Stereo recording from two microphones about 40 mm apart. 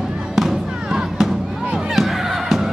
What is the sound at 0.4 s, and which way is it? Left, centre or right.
Music, centre.